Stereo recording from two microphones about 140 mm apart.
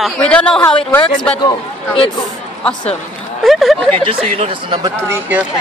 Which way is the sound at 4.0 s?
40° right (ahead or behind).